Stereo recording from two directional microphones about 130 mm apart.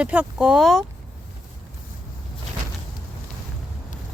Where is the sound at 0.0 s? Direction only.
10° right (ahead or behind).